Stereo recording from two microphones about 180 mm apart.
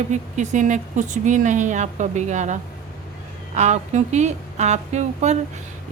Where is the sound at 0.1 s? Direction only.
45° right (ahead or behind).